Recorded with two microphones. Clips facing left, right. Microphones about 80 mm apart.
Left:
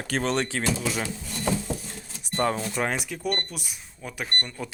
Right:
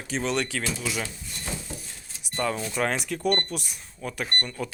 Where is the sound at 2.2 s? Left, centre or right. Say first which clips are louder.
Left 3 dB; left.